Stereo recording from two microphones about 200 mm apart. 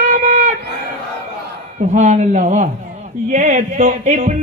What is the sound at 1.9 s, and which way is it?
Speech, 35° right (ahead or behind).